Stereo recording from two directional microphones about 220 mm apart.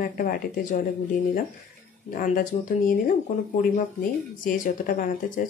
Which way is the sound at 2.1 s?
35° left (ahead or behind).